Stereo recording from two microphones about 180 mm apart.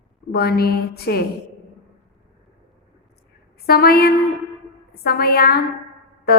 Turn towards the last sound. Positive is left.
turn(degrees=60)  # may be behind; listen again after turning